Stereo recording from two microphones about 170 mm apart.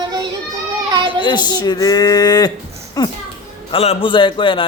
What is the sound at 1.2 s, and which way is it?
A man's voice, 25° left (ahead or behind).